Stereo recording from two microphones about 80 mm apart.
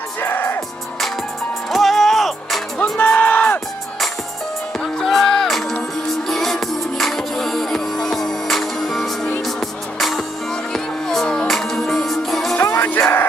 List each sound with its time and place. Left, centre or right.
0.2 s music: left
1.7 s music: centre
3.0 s music: left
4.8 s music: centre
12.7 s music: left